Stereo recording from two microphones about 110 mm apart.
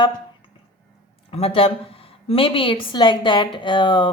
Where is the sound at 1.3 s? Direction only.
60° left (ahead or behind).